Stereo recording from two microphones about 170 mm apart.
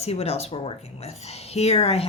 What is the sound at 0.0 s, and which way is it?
Speech, 40° left (ahead or behind).